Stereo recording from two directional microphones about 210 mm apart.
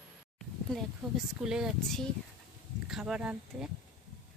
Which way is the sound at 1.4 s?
5° right (ahead or behind).